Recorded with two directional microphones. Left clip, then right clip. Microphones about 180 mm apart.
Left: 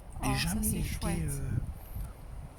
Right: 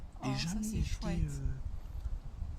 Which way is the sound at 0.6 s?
10° right (ahead or behind).